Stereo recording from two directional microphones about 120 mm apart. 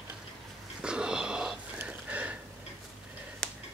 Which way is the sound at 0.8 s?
5° right (ahead or behind).